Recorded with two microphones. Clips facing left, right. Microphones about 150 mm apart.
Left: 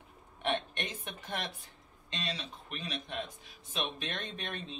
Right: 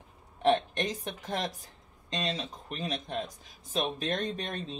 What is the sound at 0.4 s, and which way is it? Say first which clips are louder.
Speech: right 8 dB; 35° right (ahead or behind).